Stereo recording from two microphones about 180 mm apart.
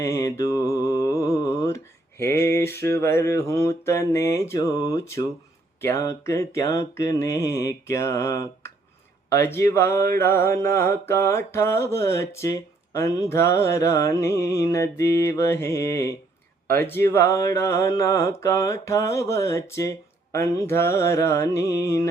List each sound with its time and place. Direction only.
0.0 s mantra: 15° left (ahead or behind)
2.2 s a sound: 15° left (ahead or behind)
2.6 s mantra: 15° left (ahead or behind)